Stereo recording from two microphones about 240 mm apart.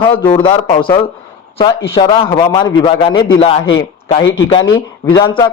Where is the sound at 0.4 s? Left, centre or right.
Centre.